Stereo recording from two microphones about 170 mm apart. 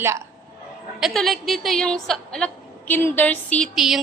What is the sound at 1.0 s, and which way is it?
A woman's voice, centre (ahead or behind).